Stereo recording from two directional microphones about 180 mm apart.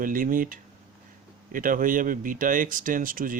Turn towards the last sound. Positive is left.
turn(degrees=-50)  # may be behind; listen again after turning